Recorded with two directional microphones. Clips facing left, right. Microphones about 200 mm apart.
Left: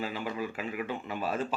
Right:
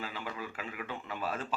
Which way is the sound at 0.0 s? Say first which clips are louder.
Left 6 dB; 15° left (ahead or behind).